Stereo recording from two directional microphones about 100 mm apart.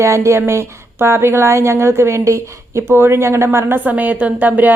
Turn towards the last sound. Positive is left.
turn(degrees=-20)  # may be behind; listen again after turning